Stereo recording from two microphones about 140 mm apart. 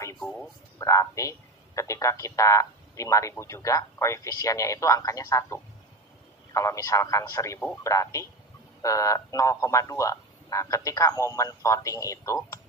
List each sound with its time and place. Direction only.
0.7 s a man's voice: 20° left (ahead or behind)